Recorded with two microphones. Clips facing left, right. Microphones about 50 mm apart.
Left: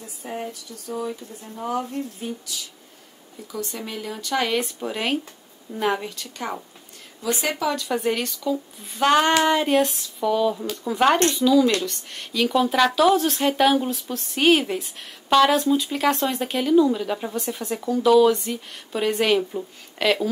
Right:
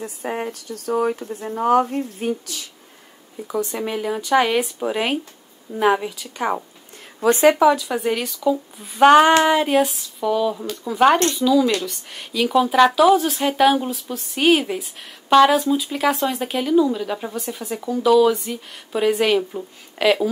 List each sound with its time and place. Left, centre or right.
0.0 s speech: right
3.4 s speech: right
7.2 s speech: right
7.8 s speech: centre